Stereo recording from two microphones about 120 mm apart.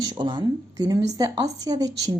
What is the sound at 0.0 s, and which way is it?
A woman's voice, 35° right (ahead or behind).